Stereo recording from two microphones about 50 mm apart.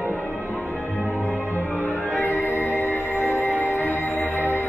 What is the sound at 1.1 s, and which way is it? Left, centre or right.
Music, left.